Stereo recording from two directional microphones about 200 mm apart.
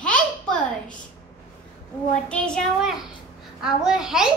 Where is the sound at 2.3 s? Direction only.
5° left (ahead or behind).